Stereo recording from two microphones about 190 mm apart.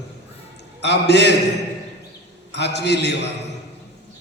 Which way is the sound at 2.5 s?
65° left (ahead or behind).